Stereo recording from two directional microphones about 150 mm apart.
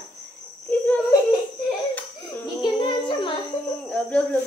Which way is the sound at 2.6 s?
35° left (ahead or behind).